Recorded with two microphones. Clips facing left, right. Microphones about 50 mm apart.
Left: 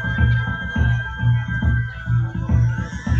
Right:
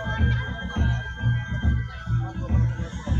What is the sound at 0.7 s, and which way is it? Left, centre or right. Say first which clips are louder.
Music: left 4 dB; left.